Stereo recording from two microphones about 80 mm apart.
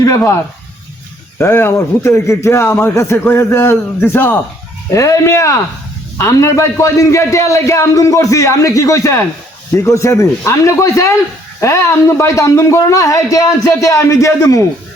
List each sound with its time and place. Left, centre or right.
1.4 s a man's voice: left
4.9 s a man's voice: left